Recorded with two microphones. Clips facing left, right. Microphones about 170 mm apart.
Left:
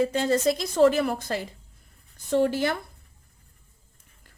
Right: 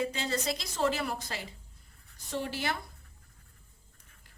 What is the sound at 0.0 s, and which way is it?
A woman's voice, 50° left (ahead or behind).